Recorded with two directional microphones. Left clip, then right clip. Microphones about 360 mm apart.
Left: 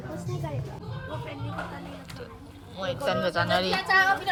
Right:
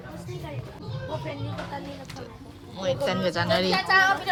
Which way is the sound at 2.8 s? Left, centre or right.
Centre.